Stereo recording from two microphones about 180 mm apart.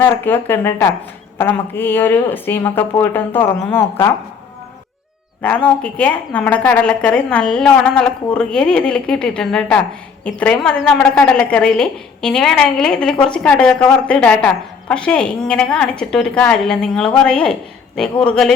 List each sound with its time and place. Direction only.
0.0 s speech: 10° left (ahead or behind)
5.4 s a woman's voice: 5° left (ahead or behind)